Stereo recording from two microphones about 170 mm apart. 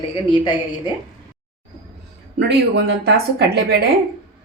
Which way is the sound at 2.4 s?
90° right.